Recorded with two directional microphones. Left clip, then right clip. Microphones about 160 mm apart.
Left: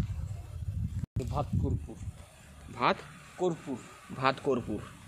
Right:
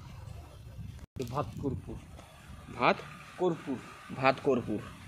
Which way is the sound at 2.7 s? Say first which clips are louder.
Right 1 dB; 10° left (ahead or behind).